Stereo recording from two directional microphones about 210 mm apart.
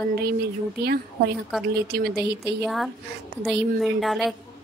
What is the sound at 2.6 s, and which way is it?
Speech, centre (ahead or behind).